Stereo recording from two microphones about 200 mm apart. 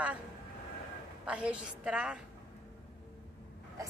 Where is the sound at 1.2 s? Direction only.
5° right (ahead or behind).